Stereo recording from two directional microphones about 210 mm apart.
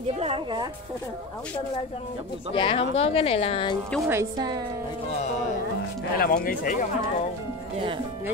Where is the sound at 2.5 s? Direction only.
25° left (ahead or behind).